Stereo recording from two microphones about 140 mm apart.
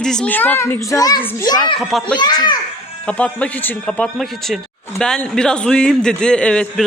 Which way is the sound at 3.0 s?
10° left (ahead or behind).